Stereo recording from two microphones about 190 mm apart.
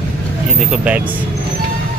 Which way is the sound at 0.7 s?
5° right (ahead or behind).